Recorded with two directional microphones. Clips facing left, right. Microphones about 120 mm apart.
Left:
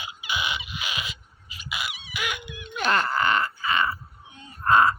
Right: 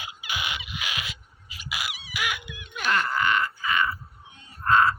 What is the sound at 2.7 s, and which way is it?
Groan, 35° left (ahead or behind).